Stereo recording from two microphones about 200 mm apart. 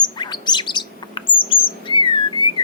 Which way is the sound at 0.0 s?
20° left (ahead or behind).